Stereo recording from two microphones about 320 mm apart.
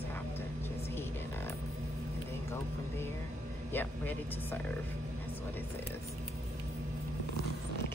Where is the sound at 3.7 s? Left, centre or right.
Centre.